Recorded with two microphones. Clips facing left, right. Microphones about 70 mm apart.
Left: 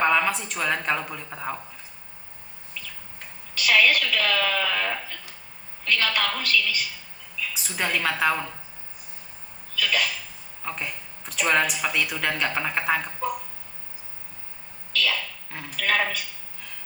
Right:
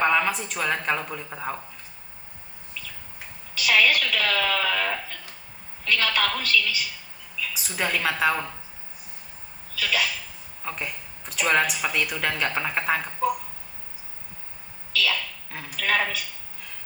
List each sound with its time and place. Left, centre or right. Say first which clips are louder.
0.0 s a woman's voice: even; centre
3.7 s a woman's voice: left 1 dB; centre
4.4 s a sound: right 1 dB; centre
5.9 s a woman's voice: right 1 dB; centre
9.8 s a woman's voice: even; centre
14.9 s a sound: right 1 dB; centre